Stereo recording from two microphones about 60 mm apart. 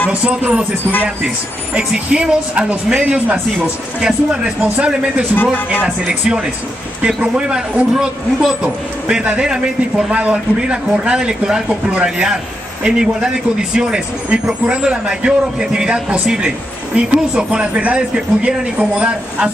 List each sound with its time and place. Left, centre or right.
0.1 s speech: centre
5.3 s speech: left
6.0 s speech: centre